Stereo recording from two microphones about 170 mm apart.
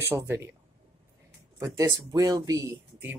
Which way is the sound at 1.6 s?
15° right (ahead or behind).